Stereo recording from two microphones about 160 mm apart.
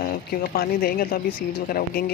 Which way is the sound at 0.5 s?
70° left (ahead or behind).